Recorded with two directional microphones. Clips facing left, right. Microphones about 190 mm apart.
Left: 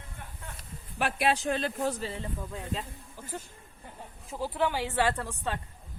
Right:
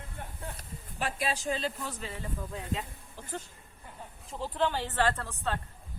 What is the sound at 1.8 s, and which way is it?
Speech, 40° left (ahead or behind).